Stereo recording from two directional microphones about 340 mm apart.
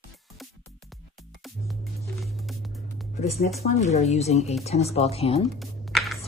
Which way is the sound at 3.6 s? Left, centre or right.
Centre.